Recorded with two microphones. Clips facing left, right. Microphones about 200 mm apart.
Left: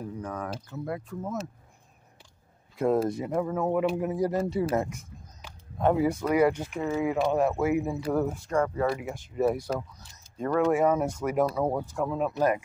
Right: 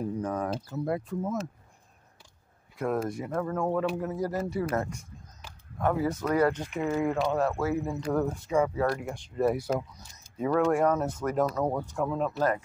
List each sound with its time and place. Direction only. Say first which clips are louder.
0.2 s speech: right 4 dB; 35° right (ahead or behind)
2.8 s speech: left 5 dB; 25° left (ahead or behind)
4.4 s speech: left 3 dB; 30° left (ahead or behind)
5.8 s speech: left 4 dB; 25° left (ahead or behind)
6.0 s speech: left 2 dB; 10° left (ahead or behind)
7.2 s speech: left 2 dB; 15° left (ahead or behind)
12.3 s speech: left 2 dB; 15° left (ahead or behind)